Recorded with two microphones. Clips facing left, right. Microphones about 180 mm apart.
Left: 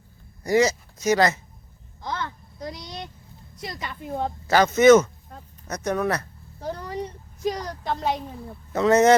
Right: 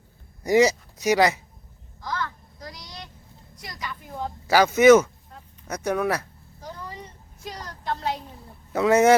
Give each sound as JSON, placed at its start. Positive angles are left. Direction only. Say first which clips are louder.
{"t": 0.4, "sound": "speech", "louder": "right 2 dB", "side_deg": -20}
{"t": 2.0, "sound": "a sound", "louder": "even", "side_deg": 20}
{"t": 3.6, "sound": "a woman's voice", "louder": "left 3 dB", "side_deg": 25}
{"t": 4.4, "sound": "speech", "louder": "even", "side_deg": -10}
{"t": 6.6, "sound": "a sound", "louder": "left 8 dB", "side_deg": 65}
{"t": 7.9, "sound": "speech", "louder": "left 2 dB", "side_deg": 60}
{"t": 8.7, "sound": "speech", "louder": "even", "side_deg": -10}